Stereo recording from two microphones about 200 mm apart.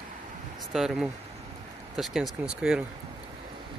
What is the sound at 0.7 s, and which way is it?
Speech, centre (ahead or behind).